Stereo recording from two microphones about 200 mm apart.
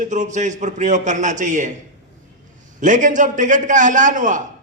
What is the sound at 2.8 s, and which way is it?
A man's voice, 40° right (ahead or behind).